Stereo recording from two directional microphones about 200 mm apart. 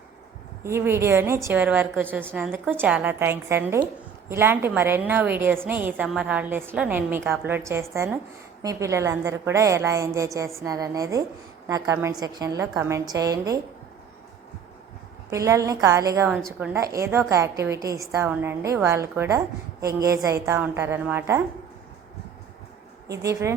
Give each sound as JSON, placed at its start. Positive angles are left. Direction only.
{"t": 0.6, "sound": "a woman's voice", "side_deg": -15}
{"t": 15.3, "sound": "a woman's voice", "side_deg": -15}
{"t": 23.2, "sound": "a woman's voice", "side_deg": -15}